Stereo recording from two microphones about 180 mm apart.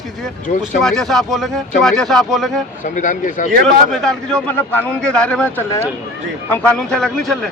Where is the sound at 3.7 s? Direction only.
Centre (ahead or behind).